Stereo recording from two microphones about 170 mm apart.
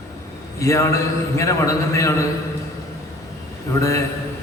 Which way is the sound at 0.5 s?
20° left (ahead or behind).